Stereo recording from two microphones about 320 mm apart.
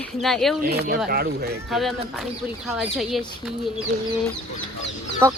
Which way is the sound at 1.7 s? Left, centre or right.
Centre.